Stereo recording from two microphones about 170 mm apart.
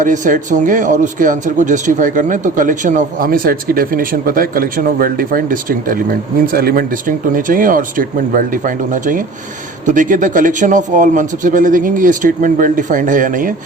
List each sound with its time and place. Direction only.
0.0 s speech: 50° right (ahead or behind)